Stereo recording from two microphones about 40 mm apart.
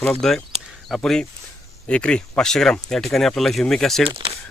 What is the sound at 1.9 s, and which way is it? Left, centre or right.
Speech, left.